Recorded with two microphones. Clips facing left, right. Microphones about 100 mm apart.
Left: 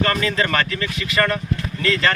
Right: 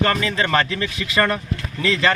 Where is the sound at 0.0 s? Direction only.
15° right (ahead or behind).